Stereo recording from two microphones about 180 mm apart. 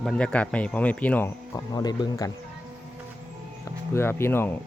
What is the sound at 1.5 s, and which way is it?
Speech, 20° left (ahead or behind).